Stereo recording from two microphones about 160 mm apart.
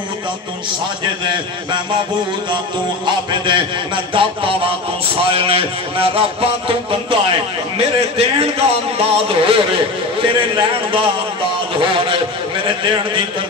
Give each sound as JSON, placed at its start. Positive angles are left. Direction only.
{"t": 1.0, "sound": "a man's voice", "side_deg": -30}
{"t": 3.1, "sound": "a man's voice", "side_deg": -30}